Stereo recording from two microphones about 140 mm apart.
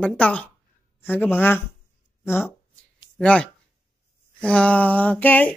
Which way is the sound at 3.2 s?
10° left (ahead or behind).